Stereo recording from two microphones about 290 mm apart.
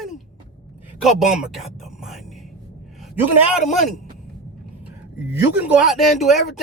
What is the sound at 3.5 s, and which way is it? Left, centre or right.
Speech, centre.